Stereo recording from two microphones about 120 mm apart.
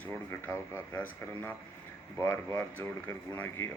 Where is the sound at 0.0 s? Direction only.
15° left (ahead or behind).